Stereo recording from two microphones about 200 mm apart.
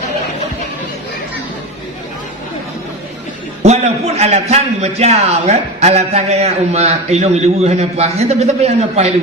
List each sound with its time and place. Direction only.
3.6 s a man's voice: 35° right (ahead or behind)